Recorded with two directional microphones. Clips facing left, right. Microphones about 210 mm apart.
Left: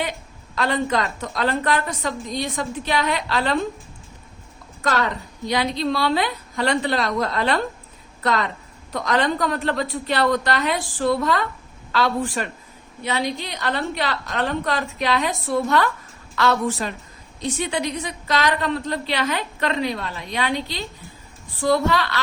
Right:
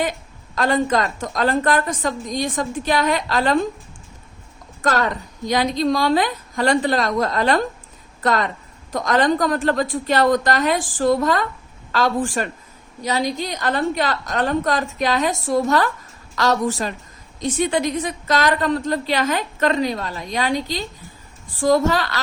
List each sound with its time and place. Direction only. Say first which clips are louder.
0.5 s a woman's voice: right 3 dB; 45° right (ahead or behind)
4.8 s a woman's voice: right 2 dB; 45° right (ahead or behind)